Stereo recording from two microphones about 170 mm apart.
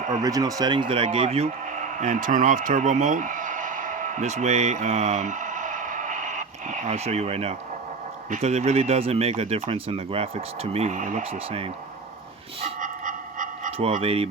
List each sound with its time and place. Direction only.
0.2 s speech: 20° right (ahead or behind)
2.0 s speech: 50° right (ahead or behind)
12.8 s dog: 50° right (ahead or behind)
13.7 s speech: 35° right (ahead or behind)